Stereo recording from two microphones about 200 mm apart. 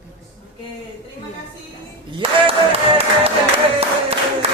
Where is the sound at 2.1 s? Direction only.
25° right (ahead or behind).